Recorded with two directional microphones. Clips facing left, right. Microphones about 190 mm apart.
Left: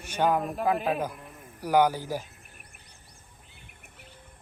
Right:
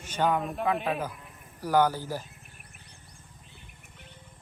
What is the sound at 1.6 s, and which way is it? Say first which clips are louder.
Speech: left 1 dB; 10° left (ahead or behind).